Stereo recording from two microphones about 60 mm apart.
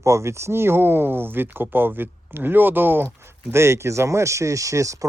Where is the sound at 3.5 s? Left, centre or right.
Right.